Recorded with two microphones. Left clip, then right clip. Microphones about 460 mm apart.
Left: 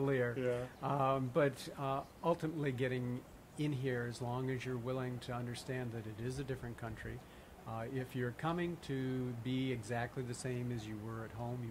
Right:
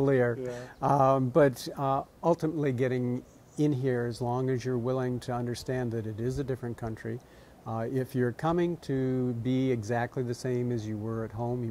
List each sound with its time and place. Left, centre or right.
0.0 s speech: right